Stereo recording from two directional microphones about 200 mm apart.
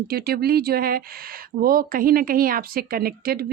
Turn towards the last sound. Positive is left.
turn(degrees=-50)  # may be behind; listen again after turning